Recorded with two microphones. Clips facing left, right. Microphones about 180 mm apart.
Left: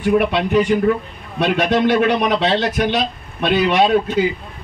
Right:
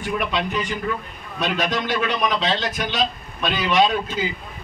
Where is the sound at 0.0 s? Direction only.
60° left (ahead or behind).